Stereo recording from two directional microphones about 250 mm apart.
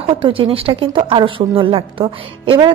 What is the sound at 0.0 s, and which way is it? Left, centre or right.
A woman's voice, right.